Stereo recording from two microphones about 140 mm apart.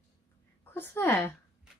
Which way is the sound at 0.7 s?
15° left (ahead or behind).